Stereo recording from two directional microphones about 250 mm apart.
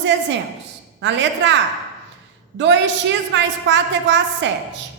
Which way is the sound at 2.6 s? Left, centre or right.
Right.